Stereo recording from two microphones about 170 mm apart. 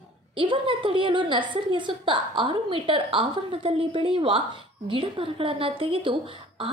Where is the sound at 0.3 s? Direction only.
30° right (ahead or behind).